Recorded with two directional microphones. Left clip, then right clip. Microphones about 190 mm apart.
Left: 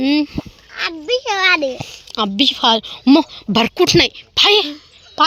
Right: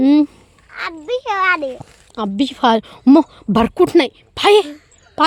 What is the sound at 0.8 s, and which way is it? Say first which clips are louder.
A child's voice: left 2 dB; 45° left (ahead or behind).